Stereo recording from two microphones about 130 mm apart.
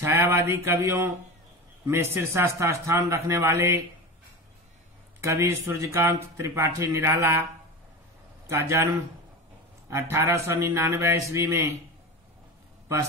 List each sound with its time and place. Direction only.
0.0 s speech: 20° right (ahead or behind)
5.2 s speech: 20° right (ahead or behind)
8.5 s speech: 20° right (ahead or behind)
9.8 s speech: 20° right (ahead or behind)